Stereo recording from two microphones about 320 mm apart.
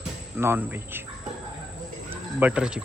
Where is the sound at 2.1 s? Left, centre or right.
Centre.